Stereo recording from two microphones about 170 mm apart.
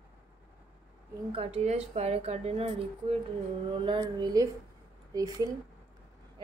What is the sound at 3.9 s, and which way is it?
A woman's voice, 25° right (ahead or behind).